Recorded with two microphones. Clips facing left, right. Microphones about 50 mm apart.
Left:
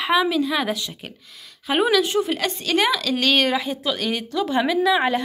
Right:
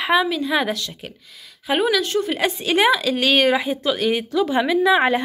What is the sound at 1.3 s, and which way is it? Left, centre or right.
Speech, centre.